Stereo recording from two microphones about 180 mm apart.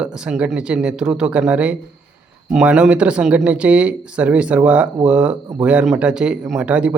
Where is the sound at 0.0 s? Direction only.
5° right (ahead or behind).